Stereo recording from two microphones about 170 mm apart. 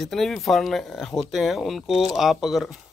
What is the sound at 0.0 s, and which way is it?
Speech, centre (ahead or behind).